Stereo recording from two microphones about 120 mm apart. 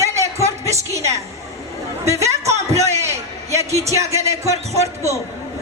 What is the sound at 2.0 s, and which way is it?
Speech, 25° right (ahead or behind).